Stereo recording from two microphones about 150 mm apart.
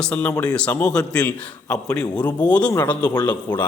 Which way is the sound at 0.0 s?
10° left (ahead or behind).